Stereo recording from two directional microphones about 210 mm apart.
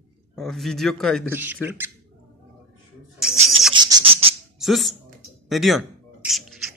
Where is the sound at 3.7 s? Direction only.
20° right (ahead or behind).